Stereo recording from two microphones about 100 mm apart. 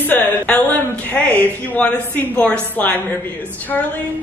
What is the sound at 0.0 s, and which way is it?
Speech, 15° left (ahead or behind).